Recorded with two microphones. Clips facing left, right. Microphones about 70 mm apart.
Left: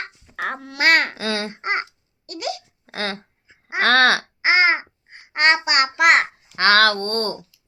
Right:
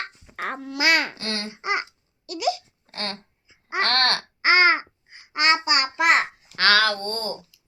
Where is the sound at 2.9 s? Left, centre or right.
Left.